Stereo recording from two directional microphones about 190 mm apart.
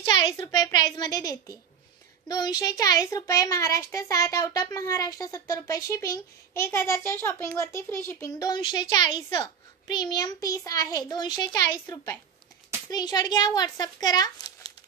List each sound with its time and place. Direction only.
0.0 s a child's voice: 25° left (ahead or behind)